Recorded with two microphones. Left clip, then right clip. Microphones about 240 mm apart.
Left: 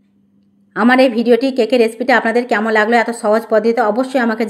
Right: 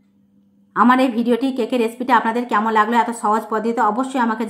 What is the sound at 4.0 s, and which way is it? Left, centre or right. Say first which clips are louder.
Speech: left 4 dB; centre.